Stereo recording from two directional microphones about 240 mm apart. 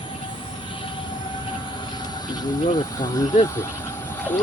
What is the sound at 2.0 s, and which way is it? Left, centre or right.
Speech, centre.